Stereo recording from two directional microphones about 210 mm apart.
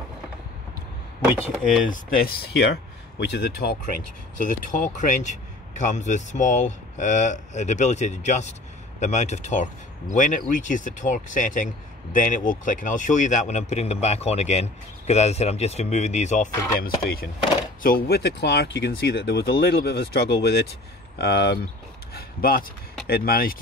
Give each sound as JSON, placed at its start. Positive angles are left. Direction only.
{"t": 1.2, "sound": "speech", "side_deg": -5}
{"t": 2.1, "sound": "speech", "side_deg": 45}
{"t": 4.6, "sound": "speech", "side_deg": 40}
{"t": 16.8, "sound": "speech", "side_deg": 45}